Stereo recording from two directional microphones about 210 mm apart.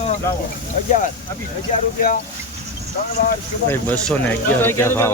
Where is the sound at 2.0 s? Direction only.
40° left (ahead or behind).